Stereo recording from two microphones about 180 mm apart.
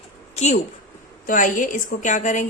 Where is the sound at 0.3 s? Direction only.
40° left (ahead or behind).